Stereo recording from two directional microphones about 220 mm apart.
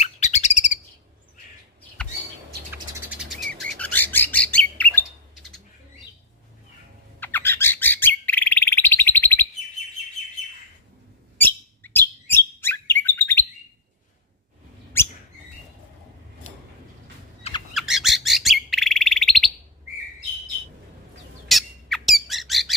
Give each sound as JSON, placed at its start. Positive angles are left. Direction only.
{"t": 0.0, "sound": "bird", "side_deg": 30}
{"t": 2.7, "sound": "bird", "side_deg": -5}
{"t": 7.2, "sound": "bird", "side_deg": 10}
{"t": 11.3, "sound": "chirp", "side_deg": 10}
{"t": 17.4, "sound": "bird", "side_deg": 25}
{"t": 17.7, "sound": "bird", "side_deg": 0}
{"t": 21.5, "sound": "bird", "side_deg": 0}